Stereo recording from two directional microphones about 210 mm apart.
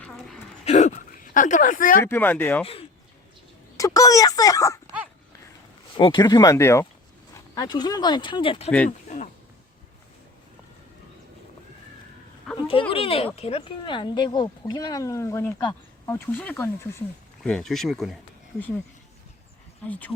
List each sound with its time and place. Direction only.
0.0 s a sound: 5° left (ahead or behind)
0.6 s speech: 35° left (ahead or behind)
2.0 s speech: 10° left (ahead or behind)
3.8 s speech: 15° left (ahead or behind)
6.0 s speech: 20° left (ahead or behind)
12.5 s speech: 25° left (ahead or behind); by 18.2 s centre (ahead or behind)
19.9 s speech: 5° left (ahead or behind)